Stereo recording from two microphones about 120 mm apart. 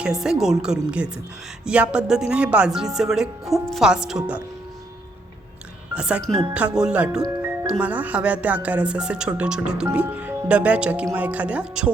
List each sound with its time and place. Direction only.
0.0 s speech: 5° right (ahead or behind)
5.9 s speech: 10° right (ahead or behind)
7.2 s music: 25° right (ahead or behind)
7.7 s speech: 10° right (ahead or behind)